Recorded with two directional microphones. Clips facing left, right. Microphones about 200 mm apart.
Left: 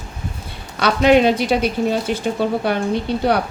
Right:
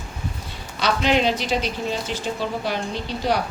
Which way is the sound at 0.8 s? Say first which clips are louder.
Left 7 dB; 55° left (ahead or behind).